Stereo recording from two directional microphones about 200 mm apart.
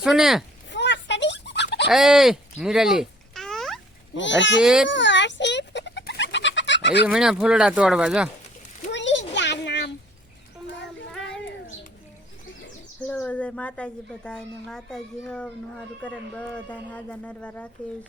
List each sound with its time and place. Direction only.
0.0 s speech: centre (ahead or behind)
0.7 s a sound: 60° left (ahead or behind)
1.9 s a sound: centre (ahead or behind)
4.2 s speech: 65° left (ahead or behind)
4.6 s speech: 5° right (ahead or behind)
4.9 s bird: 65° left (ahead or behind)
7.1 s speech: 5° right (ahead or behind)
8.9 s a sound: 65° left (ahead or behind)
13.1 s speech: 5° left (ahead or behind)